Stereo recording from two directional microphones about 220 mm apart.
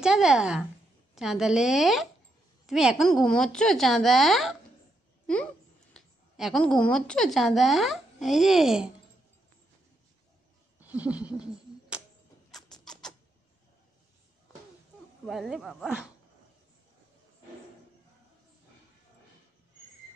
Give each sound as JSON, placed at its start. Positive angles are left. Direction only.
{"t": 0.0, "sound": "a woman's voice", "side_deg": -5}
{"t": 10.8, "sound": "a sound", "side_deg": -5}
{"t": 12.4, "sound": "rodents", "side_deg": 0}
{"t": 15.2, "sound": "a woman's voice", "side_deg": 0}